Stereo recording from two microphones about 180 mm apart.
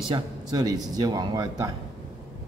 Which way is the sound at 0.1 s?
20° right (ahead or behind).